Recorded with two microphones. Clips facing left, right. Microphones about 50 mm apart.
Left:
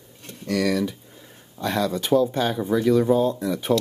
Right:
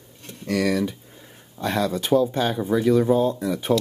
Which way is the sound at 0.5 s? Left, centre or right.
Centre.